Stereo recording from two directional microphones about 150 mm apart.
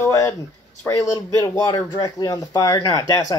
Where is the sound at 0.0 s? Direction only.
20° left (ahead or behind).